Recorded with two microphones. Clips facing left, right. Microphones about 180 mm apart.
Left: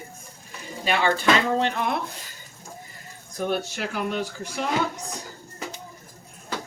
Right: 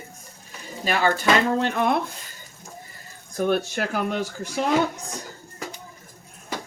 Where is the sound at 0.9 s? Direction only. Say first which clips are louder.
Right 1 dB; 45° right (ahead or behind).